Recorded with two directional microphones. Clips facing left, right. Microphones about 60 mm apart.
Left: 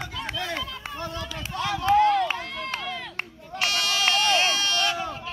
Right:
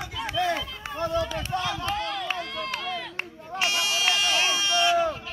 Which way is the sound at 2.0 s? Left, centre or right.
Left.